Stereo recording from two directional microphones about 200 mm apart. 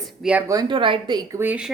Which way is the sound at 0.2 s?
5° right (ahead or behind).